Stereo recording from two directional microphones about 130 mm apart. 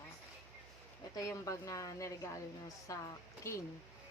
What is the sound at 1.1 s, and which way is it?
A woman's voice, 25° left (ahead or behind).